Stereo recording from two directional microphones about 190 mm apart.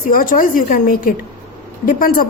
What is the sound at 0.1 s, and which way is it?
A man's voice, 45° left (ahead or behind).